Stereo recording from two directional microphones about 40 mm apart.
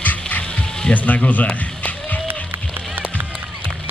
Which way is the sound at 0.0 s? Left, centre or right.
Left.